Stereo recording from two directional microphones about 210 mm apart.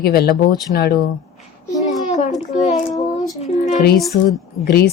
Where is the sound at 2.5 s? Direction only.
35° left (ahead or behind).